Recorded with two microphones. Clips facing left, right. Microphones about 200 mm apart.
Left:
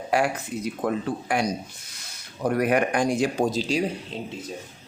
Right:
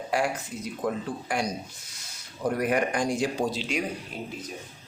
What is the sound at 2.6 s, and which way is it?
Speech, 65° left (ahead or behind).